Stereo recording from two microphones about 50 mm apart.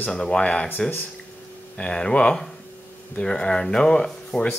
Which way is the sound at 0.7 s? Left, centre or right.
Left.